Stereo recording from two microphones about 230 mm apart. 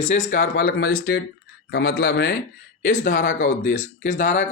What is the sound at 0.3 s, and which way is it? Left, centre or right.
Speech, left.